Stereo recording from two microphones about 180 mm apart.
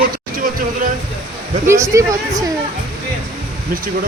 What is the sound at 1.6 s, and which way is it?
Speech, 15° right (ahead or behind).